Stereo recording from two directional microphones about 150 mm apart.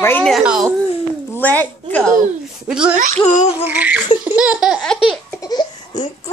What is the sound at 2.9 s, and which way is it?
Speech, 60° right (ahead or behind).